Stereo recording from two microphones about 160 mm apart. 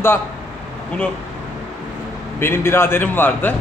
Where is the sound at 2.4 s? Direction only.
15° left (ahead or behind).